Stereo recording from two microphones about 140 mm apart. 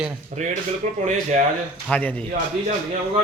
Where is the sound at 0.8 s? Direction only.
65° right (ahead or behind).